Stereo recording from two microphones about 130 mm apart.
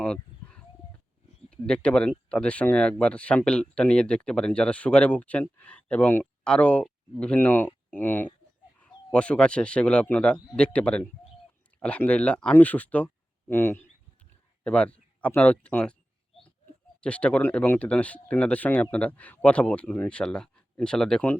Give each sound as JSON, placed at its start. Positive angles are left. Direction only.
{"t": 0.0, "sound": "a sound", "side_deg": 5}
{"t": 1.5, "sound": "speech", "side_deg": 10}
{"t": 17.0, "sound": "speech", "side_deg": 10}